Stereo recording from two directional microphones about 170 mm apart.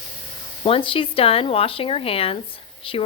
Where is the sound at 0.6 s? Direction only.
30° left (ahead or behind).